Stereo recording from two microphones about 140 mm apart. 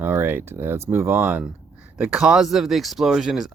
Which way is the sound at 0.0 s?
15° right (ahead or behind).